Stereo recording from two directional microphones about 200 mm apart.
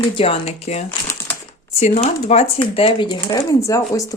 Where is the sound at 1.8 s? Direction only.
35° left (ahead or behind); by 4.0 s 20° left (ahead or behind).